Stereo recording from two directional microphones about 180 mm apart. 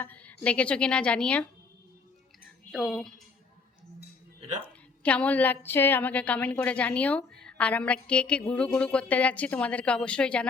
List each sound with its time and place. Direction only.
0.0 s a woman's voice: 10° left (ahead or behind)
2.7 s a woman's voice: centre (ahead or behind)
4.4 s a sound: 40° right (ahead or behind)
5.0 s a woman's voice: 5° left (ahead or behind)